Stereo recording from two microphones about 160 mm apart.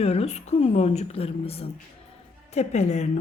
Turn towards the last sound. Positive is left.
turn(degrees=45)  # may be behind; listen again after turning